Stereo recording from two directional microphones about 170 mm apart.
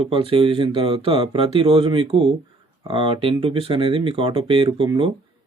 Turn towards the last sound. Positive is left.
turn(degrees=-30)  # may be behind; listen again after turning